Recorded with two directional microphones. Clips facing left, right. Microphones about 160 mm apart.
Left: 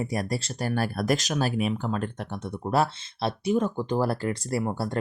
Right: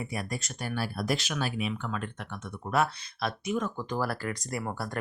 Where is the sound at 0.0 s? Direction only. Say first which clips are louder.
Left 6 dB; 40° left (ahead or behind).